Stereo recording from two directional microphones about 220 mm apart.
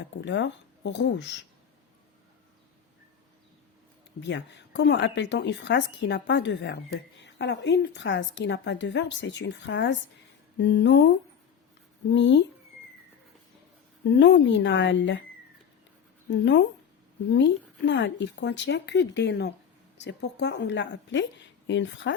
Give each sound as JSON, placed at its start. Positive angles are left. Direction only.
{"t": 0.0, "sound": "speech", "side_deg": 55}
{"t": 4.2, "sound": "speech", "side_deg": 55}
{"t": 12.1, "sound": "speech", "side_deg": 55}
{"t": 14.2, "sound": "speech", "side_deg": 55}
{"t": 16.3, "sound": "speech", "side_deg": 50}